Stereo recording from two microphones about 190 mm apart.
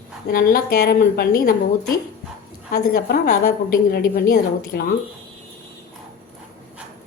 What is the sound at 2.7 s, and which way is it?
A woman's voice, 55° left (ahead or behind).